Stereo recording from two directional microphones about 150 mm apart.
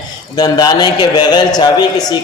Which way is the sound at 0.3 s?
25° left (ahead or behind).